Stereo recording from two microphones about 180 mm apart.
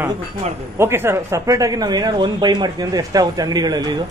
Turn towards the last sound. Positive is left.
turn(degrees=-20)  # may be behind; listen again after turning